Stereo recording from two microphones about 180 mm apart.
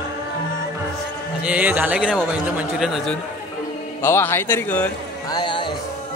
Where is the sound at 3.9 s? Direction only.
15° left (ahead or behind).